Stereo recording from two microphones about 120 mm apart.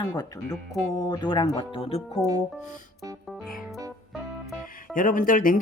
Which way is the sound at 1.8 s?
55° left (ahead or behind).